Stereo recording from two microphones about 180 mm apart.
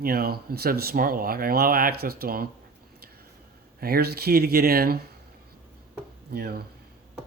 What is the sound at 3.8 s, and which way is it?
Speech, 60° right (ahead or behind).